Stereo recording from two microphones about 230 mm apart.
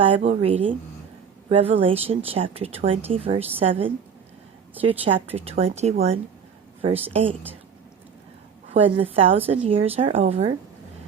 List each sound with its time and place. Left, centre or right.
0.0 s speech: right
8.7 s speech: right